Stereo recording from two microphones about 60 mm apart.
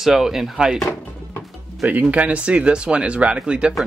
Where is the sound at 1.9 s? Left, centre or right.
Right.